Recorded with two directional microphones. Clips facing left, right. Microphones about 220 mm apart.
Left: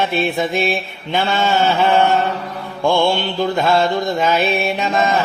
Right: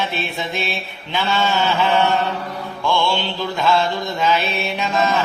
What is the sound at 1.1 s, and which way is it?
Mantra, 50° left (ahead or behind).